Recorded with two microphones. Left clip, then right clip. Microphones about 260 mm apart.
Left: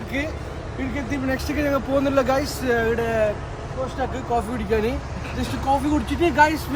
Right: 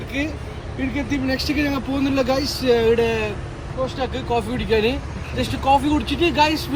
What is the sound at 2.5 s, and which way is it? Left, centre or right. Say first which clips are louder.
Speech: right 5 dB; left.